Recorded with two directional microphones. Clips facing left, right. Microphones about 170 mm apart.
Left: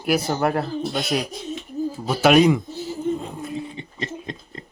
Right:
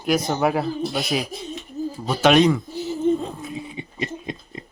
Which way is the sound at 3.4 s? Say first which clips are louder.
Left 2 dB; 10° right (ahead or behind).